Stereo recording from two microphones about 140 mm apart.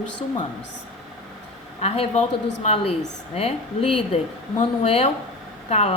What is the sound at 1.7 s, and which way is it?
A woman's voice, 45° left (ahead or behind).